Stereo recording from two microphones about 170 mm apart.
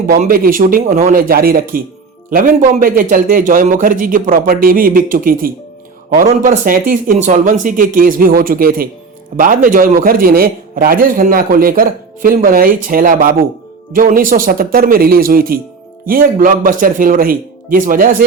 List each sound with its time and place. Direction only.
0.1 s a man's voice: 60° right (ahead or behind)
6.2 s a man's voice: 45° right (ahead or behind)